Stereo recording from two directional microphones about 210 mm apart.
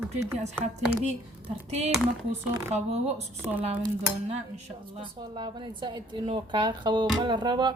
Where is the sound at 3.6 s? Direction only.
25° right (ahead or behind).